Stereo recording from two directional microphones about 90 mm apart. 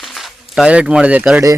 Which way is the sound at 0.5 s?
10° right (ahead or behind).